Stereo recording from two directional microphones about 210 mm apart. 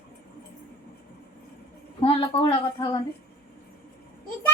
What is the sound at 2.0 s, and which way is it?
A woman's voice, 25° left (ahead or behind).